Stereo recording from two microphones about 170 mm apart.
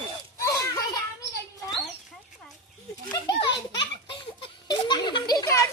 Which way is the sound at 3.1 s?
25° left (ahead or behind).